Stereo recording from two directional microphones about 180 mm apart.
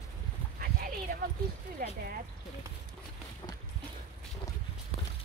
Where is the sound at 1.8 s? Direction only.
55° right (ahead or behind).